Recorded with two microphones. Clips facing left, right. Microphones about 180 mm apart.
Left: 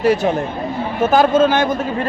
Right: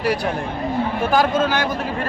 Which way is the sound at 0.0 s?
25° left (ahead or behind).